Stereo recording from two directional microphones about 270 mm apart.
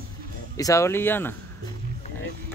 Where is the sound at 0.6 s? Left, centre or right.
Centre.